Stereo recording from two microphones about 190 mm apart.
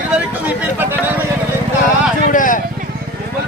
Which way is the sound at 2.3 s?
45° left (ahead or behind).